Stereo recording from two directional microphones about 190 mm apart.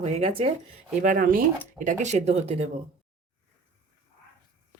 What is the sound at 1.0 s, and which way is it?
Speech, 45° right (ahead or behind).